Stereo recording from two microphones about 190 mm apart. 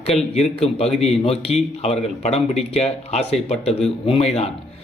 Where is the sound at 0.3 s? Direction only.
35° left (ahead or behind).